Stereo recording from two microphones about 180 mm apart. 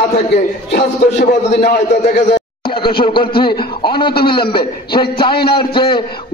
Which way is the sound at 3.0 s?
30° left (ahead or behind).